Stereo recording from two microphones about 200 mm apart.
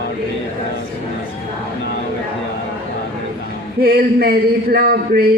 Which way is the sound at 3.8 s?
50° right (ahead or behind).